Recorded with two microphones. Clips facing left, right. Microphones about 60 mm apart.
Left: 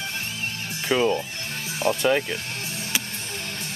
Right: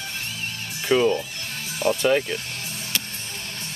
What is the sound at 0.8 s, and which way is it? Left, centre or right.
Speech, centre.